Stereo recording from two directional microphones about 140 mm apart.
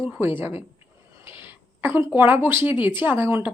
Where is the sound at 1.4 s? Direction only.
15° right (ahead or behind).